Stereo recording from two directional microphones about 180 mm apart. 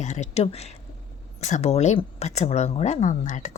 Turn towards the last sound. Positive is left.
turn(degrees=45)  # may be behind; listen again after turning